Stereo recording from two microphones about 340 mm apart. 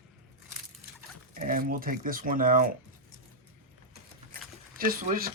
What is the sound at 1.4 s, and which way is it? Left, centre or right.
Speech, right.